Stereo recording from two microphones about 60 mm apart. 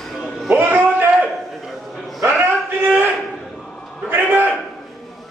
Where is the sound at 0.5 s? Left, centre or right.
Right.